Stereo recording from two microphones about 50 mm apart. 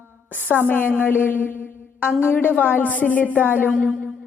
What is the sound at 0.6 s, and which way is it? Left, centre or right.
A woman's voice, left.